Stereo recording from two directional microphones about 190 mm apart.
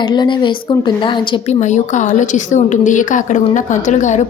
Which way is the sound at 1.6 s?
40° left (ahead or behind).